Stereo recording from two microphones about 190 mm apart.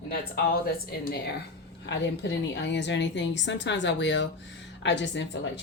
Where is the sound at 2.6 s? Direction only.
65° left (ahead or behind).